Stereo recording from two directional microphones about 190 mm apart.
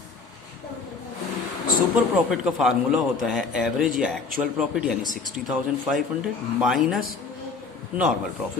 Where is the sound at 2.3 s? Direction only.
5° right (ahead or behind).